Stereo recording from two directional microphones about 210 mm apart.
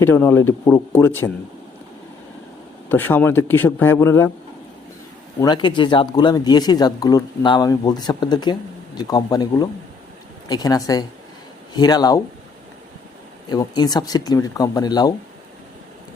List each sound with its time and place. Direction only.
0.0 s a man's voice: 10° left (ahead or behind)
2.9 s a man's voice: 10° left (ahead or behind)
5.4 s a man's voice: 20° left (ahead or behind)
13.5 s speech: 20° left (ahead or behind)